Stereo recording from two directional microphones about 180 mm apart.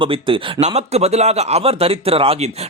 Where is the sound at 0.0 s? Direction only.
30° right (ahead or behind).